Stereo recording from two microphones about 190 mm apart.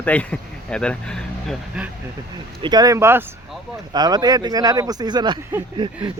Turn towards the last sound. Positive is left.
turn(degrees=-25)  # may be behind; listen again after turning